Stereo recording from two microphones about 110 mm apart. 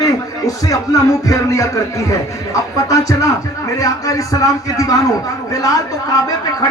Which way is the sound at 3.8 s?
30° left (ahead or behind).